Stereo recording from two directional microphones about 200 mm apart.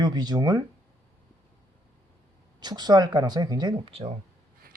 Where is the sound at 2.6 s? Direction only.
20° right (ahead or behind).